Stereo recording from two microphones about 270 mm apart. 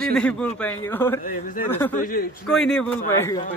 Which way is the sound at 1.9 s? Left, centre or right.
Left.